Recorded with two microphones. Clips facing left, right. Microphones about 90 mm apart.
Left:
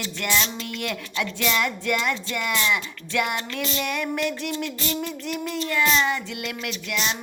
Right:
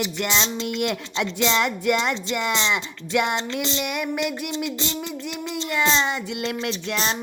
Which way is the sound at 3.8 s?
10° right (ahead or behind).